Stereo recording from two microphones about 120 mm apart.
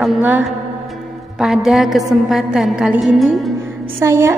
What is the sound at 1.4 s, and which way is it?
A woman's voice, 5° right (ahead or behind).